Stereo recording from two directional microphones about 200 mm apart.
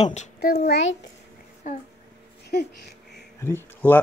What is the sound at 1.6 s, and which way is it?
Speech, 35° left (ahead or behind).